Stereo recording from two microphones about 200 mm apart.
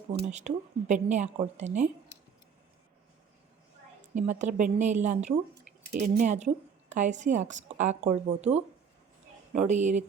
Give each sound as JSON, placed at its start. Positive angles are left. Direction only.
{"t": 0.3, "sound": "a woman's voice", "side_deg": -35}
{"t": 4.1, "sound": "a woman's voice", "side_deg": -35}